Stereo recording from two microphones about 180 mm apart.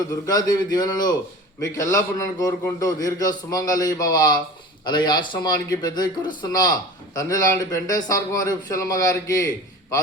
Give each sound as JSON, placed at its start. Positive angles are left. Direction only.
{"t": 0.1, "sound": "a man's voice", "side_deg": 20}